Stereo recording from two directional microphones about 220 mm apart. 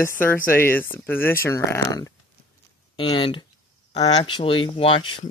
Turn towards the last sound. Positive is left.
turn(degrees=25)  # may be behind; listen again after turning